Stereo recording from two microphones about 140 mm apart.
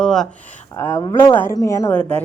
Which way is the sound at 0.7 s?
20° left (ahead or behind).